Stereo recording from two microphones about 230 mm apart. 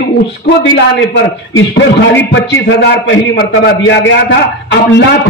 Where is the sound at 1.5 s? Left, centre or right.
Left.